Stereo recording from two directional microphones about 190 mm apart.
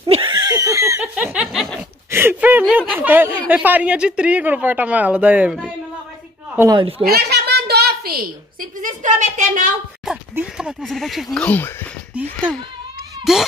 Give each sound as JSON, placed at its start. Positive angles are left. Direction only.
{"t": 0.0, "sound": "laughter", "side_deg": -25}
{"t": 1.1, "sound": "snicker", "side_deg": -5}
{"t": 2.0, "sound": "a sound", "side_deg": -10}
{"t": 3.4, "sound": "speech", "side_deg": -10}
{"t": 6.8, "sound": "a child's voice", "side_deg": -30}
{"t": 7.1, "sound": "a sound", "side_deg": -55}
{"t": 10.3, "sound": "speech", "side_deg": -5}
{"t": 13.2, "sound": "a child's voice", "side_deg": 0}